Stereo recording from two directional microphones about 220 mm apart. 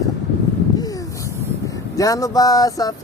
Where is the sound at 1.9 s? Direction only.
15° left (ahead or behind).